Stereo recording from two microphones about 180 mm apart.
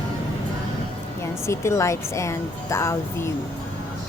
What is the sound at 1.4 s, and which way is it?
A woman's voice, 15° left (ahead or behind).